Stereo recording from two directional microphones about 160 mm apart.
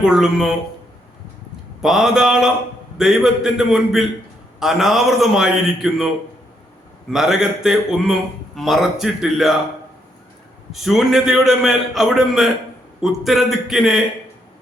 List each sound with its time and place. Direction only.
0.0 s a man's voice: 5° right (ahead or behind)
1.8 s a man's voice: 5° right (ahead or behind)
7.1 s a man's voice: 5° right (ahead or behind)
10.7 s a man's voice: centre (ahead or behind)